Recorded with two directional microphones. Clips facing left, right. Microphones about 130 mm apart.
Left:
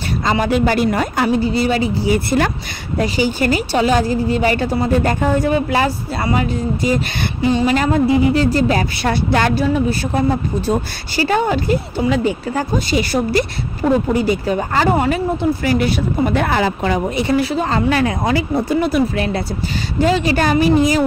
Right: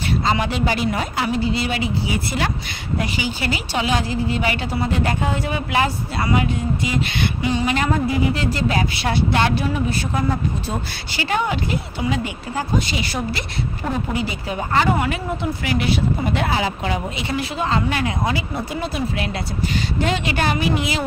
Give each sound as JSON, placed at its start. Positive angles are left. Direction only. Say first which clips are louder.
{"t": 0.3, "sound": "a woman's voice", "louder": "left 7 dB", "side_deg": 45}
{"t": 2.1, "sound": "a woman's voice", "louder": "left 6 dB", "side_deg": 50}